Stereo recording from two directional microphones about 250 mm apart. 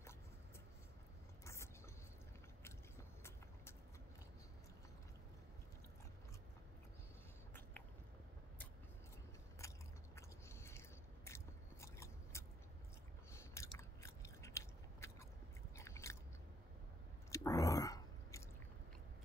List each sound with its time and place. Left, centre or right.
1.4 s a sound: centre
9.6 s biting: centre
17.3 s chewing: centre